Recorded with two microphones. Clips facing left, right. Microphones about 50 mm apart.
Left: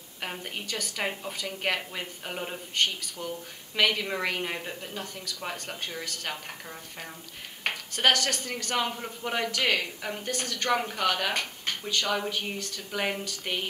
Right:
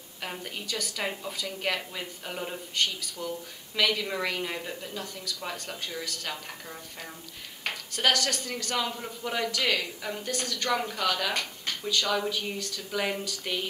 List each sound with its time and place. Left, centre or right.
0.2 s a sound: centre
0.6 s speech: left
2.8 s speech: left
7.6 s speech: left